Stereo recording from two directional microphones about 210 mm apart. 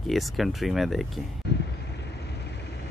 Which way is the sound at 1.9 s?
55° left (ahead or behind).